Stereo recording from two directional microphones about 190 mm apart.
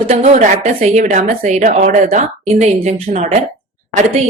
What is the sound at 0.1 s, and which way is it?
A woman's voice, 35° right (ahead or behind).